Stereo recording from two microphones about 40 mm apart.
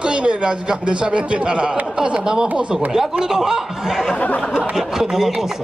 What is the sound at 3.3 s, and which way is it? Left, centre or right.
Snicker, centre.